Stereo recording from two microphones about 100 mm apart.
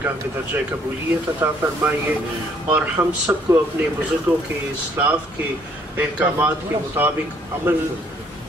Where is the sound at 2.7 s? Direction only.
25° right (ahead or behind).